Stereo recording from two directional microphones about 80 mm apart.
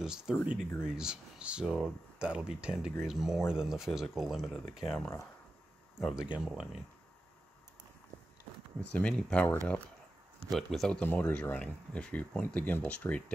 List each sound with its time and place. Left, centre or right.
0.0 s speech: centre
8.9 s speech: centre
10.5 s speech: centre
11.1 s speech: left